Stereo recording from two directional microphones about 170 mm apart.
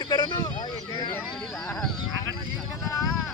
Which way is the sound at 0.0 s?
25° left (ahead or behind).